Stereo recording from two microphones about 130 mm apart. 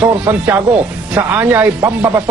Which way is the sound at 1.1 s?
15° right (ahead or behind).